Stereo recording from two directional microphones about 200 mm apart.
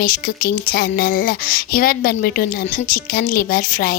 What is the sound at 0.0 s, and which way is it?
Speech, 45° left (ahead or behind).